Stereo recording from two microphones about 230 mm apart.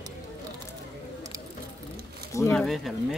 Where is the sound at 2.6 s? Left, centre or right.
Centre.